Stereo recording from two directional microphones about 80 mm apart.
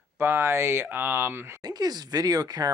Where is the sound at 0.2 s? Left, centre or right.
Right.